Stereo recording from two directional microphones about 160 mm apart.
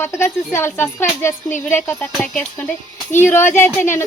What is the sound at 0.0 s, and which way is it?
Speech, 15° left (ahead or behind).